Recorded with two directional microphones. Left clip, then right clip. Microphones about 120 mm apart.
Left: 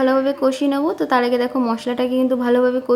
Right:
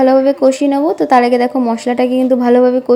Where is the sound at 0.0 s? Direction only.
40° right (ahead or behind).